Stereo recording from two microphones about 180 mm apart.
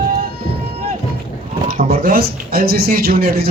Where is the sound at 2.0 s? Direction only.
55° right (ahead or behind).